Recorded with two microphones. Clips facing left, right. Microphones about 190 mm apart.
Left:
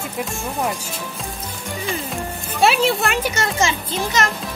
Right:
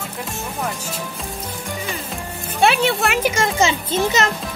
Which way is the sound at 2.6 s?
Centre (ahead or behind).